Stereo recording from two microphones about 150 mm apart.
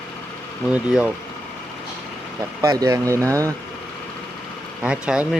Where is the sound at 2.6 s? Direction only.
20° right (ahead or behind).